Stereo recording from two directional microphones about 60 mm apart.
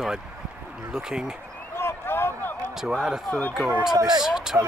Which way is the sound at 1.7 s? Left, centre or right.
Left.